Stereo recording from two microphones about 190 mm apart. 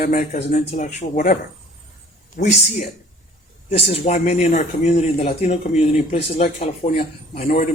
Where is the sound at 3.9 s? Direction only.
35° left (ahead or behind).